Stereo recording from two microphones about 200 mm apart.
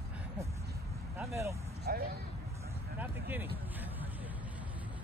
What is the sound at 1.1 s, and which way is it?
Vehicle, 10° right (ahead or behind).